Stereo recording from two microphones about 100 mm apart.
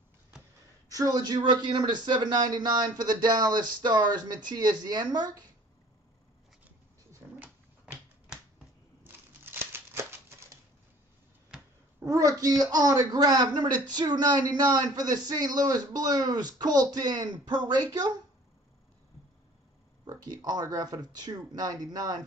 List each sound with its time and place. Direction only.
0.8 s a man's voice: 35° right (ahead or behind)
7.3 s dog: 15° right (ahead or behind)
9.0 s a sound: 20° right (ahead or behind)
12.1 s a man's voice: 35° right (ahead or behind)
20.1 s a man's voice: 40° right (ahead or behind)